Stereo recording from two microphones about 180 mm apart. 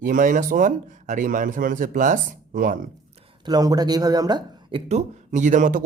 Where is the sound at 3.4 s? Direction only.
20° right (ahead or behind).